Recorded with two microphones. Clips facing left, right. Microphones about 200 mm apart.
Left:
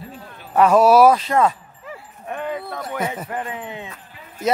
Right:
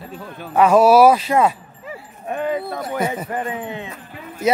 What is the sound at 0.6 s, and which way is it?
Livestock, centre (ahead or behind).